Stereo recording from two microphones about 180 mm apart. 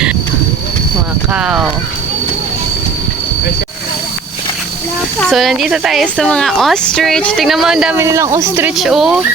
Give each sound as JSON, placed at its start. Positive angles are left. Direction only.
{"t": 1.3, "sound": "a woman's voice", "side_deg": -5}
{"t": 5.2, "sound": "a woman's voice", "side_deg": 0}
{"t": 8.0, "sound": "speech", "side_deg": -15}
{"t": 8.7, "sound": "a woman's voice", "side_deg": 0}